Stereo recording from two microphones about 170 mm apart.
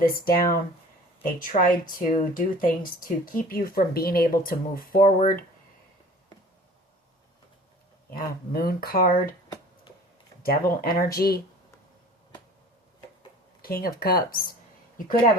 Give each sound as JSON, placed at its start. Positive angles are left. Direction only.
{"t": 0.0, "sound": "speech", "side_deg": 60}
{"t": 8.2, "sound": "speech", "side_deg": 65}
{"t": 10.4, "sound": "speech", "side_deg": 60}
{"t": 13.6, "sound": "a woman's voice", "side_deg": 60}